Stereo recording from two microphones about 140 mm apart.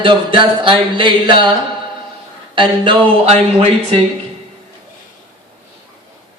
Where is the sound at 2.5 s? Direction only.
35° right (ahead or behind).